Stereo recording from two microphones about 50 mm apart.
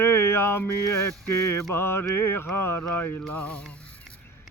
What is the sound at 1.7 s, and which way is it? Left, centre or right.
Speech, left.